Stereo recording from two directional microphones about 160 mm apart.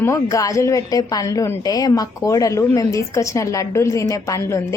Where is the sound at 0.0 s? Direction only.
20° left (ahead or behind).